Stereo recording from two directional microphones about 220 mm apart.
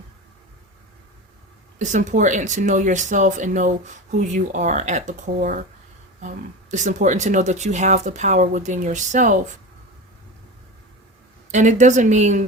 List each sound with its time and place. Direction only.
1.8 s speech: 35° right (ahead or behind)
11.5 s speech: 35° right (ahead or behind)